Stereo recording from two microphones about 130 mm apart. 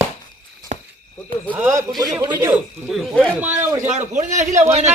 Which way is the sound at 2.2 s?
30° right (ahead or behind).